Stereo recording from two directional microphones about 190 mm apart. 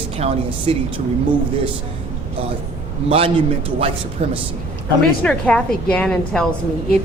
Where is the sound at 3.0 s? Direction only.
30° right (ahead or behind).